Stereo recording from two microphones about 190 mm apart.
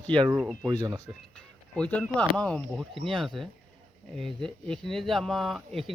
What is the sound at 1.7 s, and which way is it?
Speech, 5° left (ahead or behind).